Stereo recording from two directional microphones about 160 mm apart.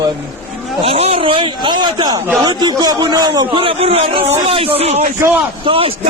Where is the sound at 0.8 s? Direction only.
40° right (ahead or behind); by 3.4 s 25° right (ahead or behind).